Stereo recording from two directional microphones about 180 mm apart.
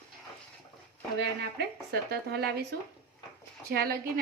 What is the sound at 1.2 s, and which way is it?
A woman's voice, 65° right (ahead or behind).